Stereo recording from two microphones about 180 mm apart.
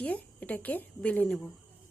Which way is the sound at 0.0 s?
5° left (ahead or behind).